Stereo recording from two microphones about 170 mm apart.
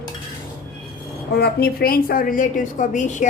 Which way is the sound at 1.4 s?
65° left (ahead or behind).